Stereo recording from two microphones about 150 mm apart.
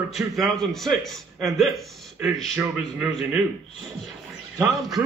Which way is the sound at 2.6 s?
10° right (ahead or behind).